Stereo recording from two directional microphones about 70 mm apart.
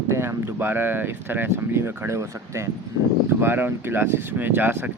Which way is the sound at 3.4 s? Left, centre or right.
Right.